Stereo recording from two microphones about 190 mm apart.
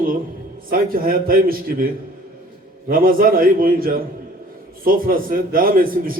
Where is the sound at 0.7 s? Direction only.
50° right (ahead or behind).